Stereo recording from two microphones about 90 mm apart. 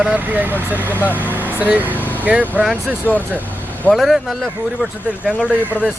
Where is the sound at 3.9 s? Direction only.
Centre (ahead or behind).